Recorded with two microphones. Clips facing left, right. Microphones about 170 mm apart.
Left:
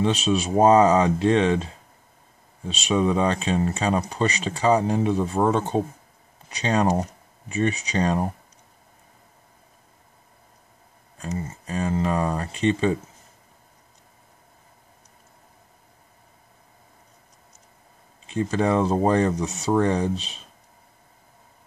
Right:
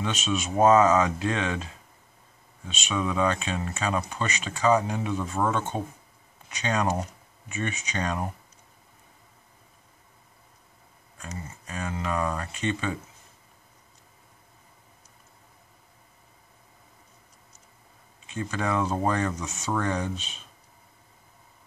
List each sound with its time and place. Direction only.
0.0 s speech: 30° left (ahead or behind)
11.1 s speech: 35° left (ahead or behind)
18.3 s speech: 30° left (ahead or behind)